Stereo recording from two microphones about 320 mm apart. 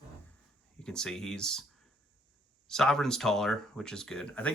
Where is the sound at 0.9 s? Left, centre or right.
Centre.